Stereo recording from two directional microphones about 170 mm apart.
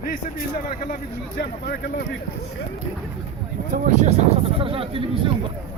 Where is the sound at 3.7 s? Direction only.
50° right (ahead or behind).